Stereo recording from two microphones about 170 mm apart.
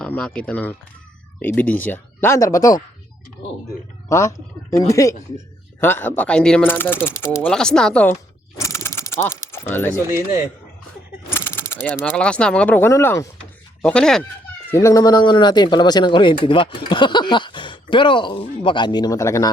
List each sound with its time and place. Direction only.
0.0 s speech: 10° left (ahead or behind)
4.1 s speech: 20° left (ahead or behind)
8.5 s a sound: 15° left (ahead or behind)
11.3 s speech: 15° left (ahead or behind)
13.8 s speech: 5° left (ahead or behind)
14.7 s speech: 15° left (ahead or behind)